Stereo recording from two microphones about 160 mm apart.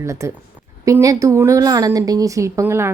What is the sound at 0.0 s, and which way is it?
A woman's voice, 20° right (ahead or behind).